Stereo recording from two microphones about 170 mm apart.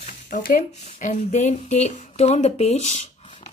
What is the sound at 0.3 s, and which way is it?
Speech, 60° left (ahead or behind).